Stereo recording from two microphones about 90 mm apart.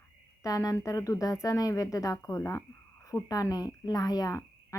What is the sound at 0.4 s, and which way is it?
A woman's voice, 40° left (ahead or behind).